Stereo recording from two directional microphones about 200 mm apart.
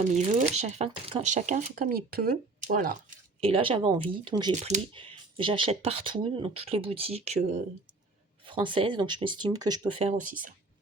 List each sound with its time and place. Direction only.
0.1 s speech: 35° right (ahead or behind)
3.4 s speech: 25° right (ahead or behind)
8.4 s speech: 25° right (ahead or behind)
10.0 s speech: 40° right (ahead or behind)